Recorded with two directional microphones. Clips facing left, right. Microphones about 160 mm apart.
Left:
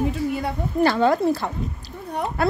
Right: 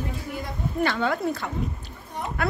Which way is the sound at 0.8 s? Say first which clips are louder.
Left 7 dB; 35° left (ahead or behind).